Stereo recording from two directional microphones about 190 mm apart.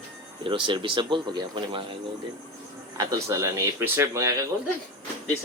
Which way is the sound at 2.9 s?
15° right (ahead or behind).